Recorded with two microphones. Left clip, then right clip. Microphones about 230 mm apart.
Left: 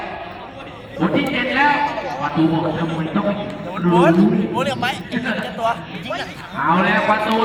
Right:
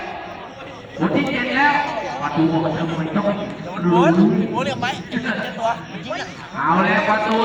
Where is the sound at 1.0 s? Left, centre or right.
Left.